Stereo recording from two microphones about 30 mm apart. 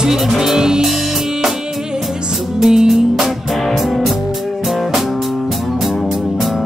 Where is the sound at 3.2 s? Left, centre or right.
Centre.